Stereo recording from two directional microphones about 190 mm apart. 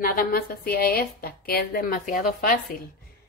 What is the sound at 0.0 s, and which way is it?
A woman's voice, 50° left (ahead or behind).